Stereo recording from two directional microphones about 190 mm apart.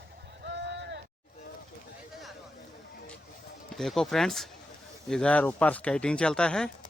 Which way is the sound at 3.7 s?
Centre (ahead or behind).